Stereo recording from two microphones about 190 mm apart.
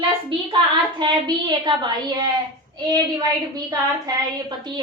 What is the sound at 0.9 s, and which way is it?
A woman's voice, 25° right (ahead or behind).